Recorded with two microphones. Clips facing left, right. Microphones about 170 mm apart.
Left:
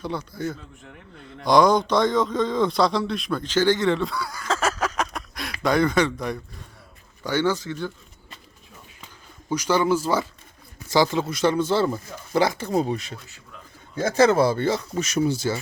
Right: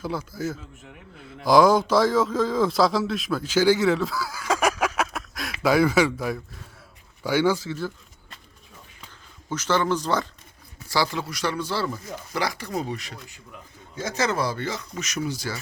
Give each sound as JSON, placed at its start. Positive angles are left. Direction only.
{"t": 0.0, "sound": "a man's voice", "side_deg": -5}
{"t": 9.5, "sound": "speech", "side_deg": 10}
{"t": 10.8, "sound": "speech", "side_deg": 20}